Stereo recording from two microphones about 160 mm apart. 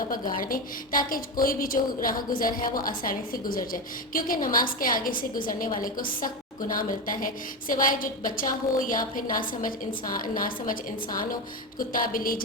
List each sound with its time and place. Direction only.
0.1 s a woman's voice: 60° left (ahead or behind)